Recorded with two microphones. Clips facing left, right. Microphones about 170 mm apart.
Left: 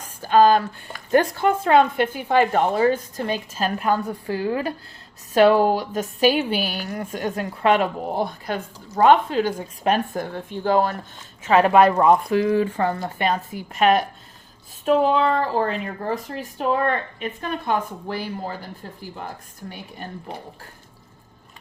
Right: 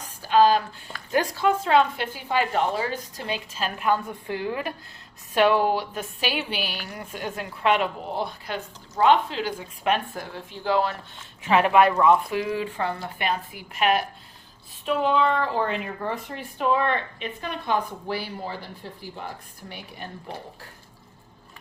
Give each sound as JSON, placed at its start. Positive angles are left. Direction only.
{"t": 0.2, "sound": "a woman's voice", "side_deg": 50}